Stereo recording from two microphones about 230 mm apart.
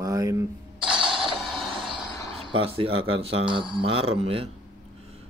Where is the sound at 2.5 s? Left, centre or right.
Right.